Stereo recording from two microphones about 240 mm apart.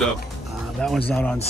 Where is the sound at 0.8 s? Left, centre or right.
Centre.